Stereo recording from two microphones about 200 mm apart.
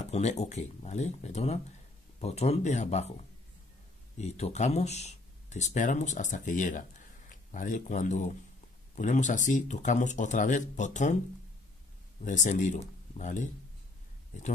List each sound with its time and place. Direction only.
0.0 s speech: 35° left (ahead or behind)
4.2 s speech: 35° left (ahead or behind)
12.2 s speech: 40° left (ahead or behind)